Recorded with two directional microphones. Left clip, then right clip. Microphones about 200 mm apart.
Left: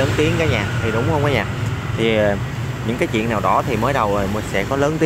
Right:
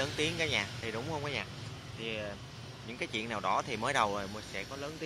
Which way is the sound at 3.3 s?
10° right (ahead or behind).